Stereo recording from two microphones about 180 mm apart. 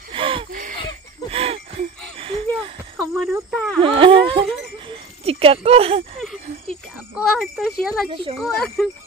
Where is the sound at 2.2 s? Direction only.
30° right (ahead or behind).